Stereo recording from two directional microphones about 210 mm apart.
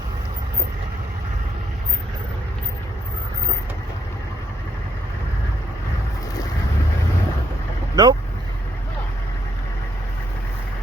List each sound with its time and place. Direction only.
8.0 s speech: 20° right (ahead or behind)